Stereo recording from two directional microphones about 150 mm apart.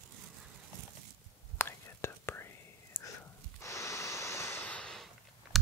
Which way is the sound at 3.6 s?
20° left (ahead or behind).